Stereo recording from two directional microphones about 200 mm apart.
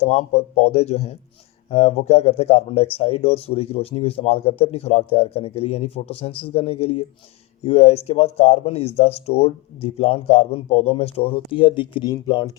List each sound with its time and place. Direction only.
0.0 s speech: 30° left (ahead or behind)